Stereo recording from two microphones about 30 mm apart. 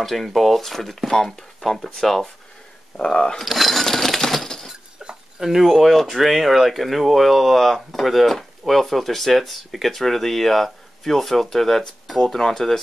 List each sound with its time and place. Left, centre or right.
0.0 s speech: centre
3.1 s speech: left
3.4 s speech: centre
3.8 s a sound: centre
5.4 s speech: centre